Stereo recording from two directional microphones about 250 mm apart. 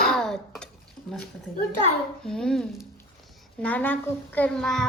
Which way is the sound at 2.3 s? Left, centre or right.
Centre.